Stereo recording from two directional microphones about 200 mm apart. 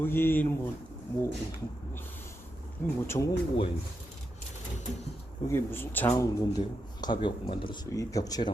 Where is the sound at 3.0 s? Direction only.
15° left (ahead or behind).